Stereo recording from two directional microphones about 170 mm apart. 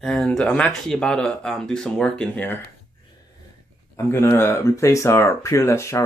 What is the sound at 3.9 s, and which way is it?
Speech, 15° left (ahead or behind).